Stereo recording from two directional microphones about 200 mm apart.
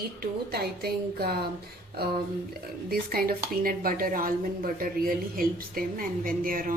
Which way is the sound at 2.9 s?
50° right (ahead or behind).